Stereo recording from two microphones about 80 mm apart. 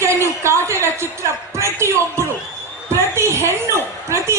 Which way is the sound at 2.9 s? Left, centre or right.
Right.